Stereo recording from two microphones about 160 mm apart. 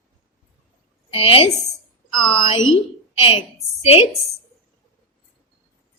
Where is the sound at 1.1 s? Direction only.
35° left (ahead or behind).